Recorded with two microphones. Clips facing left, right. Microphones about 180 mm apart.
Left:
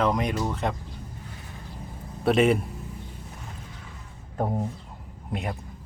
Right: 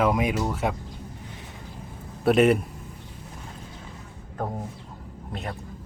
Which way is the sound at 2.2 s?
Centre (ahead or behind).